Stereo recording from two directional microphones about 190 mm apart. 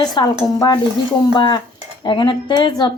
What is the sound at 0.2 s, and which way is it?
A woman's voice, 25° left (ahead or behind).